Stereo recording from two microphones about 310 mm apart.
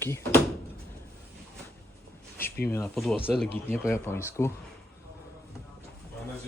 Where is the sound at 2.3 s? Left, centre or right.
Centre.